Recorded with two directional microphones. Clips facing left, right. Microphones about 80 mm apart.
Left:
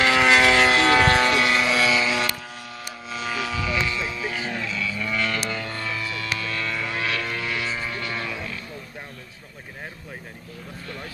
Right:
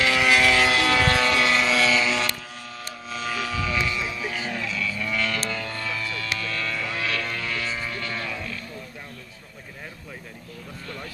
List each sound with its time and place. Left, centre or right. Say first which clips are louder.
0.0 s vehicle: left 3 dB; left; by 3.7 s centre
3.8 s music: left 1 dB; centre
4.4 s vehicle: left 1 dB; centre